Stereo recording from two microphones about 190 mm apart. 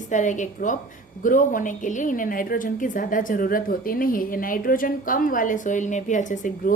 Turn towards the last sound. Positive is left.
turn(degrees=40)  # may be behind; listen again after turning